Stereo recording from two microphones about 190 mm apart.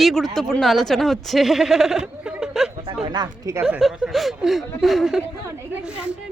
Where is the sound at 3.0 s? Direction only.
20° right (ahead or behind).